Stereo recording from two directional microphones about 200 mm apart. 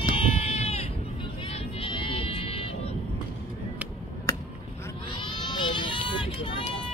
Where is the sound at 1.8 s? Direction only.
25° left (ahead or behind).